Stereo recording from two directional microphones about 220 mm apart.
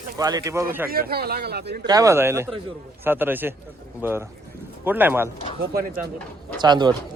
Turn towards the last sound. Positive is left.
turn(degrees=-20)  # may be behind; listen again after turning